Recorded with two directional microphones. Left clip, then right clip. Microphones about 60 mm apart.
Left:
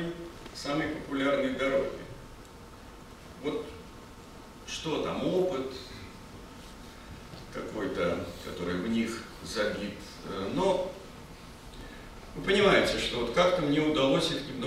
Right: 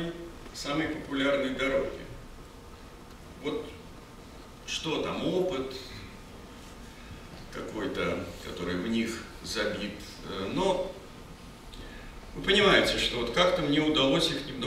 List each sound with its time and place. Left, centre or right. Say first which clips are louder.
0.6 s a man's voice: right 1 dB; right
3.4 s a man's voice: even; right
4.6 s a man's voice: right 1 dB; right
7.5 s a man's voice: even; right
12.4 s a man's voice: right 1 dB; right